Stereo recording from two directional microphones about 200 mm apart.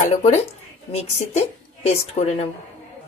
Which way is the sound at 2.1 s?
30° left (ahead or behind).